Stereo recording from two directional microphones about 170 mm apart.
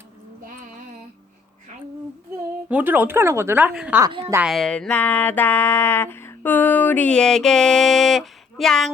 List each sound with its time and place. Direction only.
2.6 s speech: 10° right (ahead or behind)
4.0 s a woman's voice: 30° right (ahead or behind)
4.4 s a sound: centre (ahead or behind)